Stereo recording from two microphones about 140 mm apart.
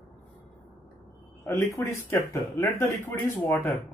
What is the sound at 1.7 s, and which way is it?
Speech, 20° left (ahead or behind).